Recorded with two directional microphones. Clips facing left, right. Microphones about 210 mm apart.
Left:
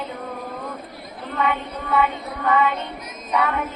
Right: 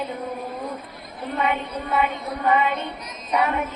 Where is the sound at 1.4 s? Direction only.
25° right (ahead or behind).